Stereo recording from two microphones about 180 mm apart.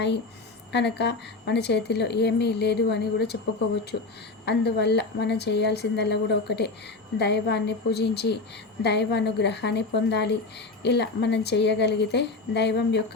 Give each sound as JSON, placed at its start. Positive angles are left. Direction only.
{"t": 0.7, "sound": "speech", "side_deg": 70}
{"t": 3.9, "sound": "a woman's voice", "side_deg": 90}
{"t": 4.4, "sound": "speech", "side_deg": 70}